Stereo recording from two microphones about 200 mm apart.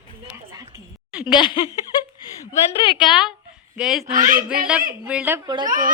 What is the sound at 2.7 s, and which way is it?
Speech, 25° left (ahead or behind).